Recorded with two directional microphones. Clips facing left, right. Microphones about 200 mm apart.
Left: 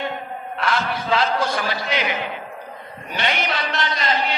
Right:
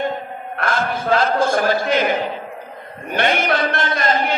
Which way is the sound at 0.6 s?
50° right (ahead or behind).